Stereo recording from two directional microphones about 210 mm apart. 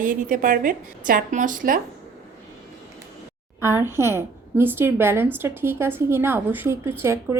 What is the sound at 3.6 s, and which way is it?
A woman's voice, 10° right (ahead or behind).